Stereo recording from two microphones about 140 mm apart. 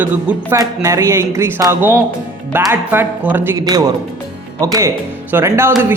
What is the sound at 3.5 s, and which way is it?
Speech, 25° right (ahead or behind).